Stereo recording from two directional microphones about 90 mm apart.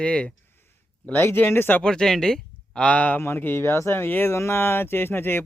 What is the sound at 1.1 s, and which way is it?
Speech, 25° left (ahead or behind).